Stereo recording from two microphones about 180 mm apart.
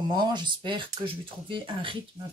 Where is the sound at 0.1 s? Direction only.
25° right (ahead or behind).